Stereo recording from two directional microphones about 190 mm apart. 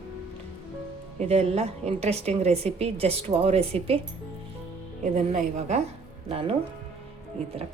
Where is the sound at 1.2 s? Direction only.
35° right (ahead or behind).